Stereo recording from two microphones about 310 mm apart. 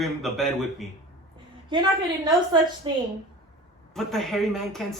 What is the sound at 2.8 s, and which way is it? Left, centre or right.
Speech, centre.